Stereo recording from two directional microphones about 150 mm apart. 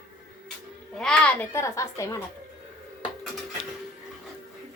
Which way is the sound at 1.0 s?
5° left (ahead or behind).